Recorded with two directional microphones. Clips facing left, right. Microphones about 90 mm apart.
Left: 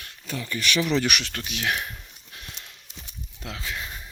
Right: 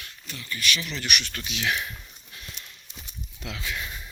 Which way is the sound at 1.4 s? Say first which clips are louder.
Left 1 dB; 50° left (ahead or behind).